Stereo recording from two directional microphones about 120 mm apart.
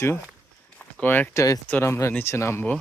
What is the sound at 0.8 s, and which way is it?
Speech, 15° left (ahead or behind).